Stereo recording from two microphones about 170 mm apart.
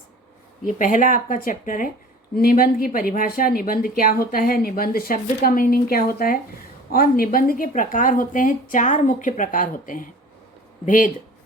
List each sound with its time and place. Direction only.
0.6 s a woman's voice: 50° left (ahead or behind)